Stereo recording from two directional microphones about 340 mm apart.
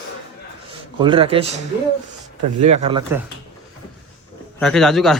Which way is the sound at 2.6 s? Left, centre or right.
Centre.